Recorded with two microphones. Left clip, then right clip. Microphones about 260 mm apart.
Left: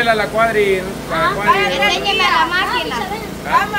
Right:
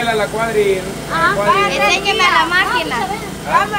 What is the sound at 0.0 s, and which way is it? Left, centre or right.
Speech, left.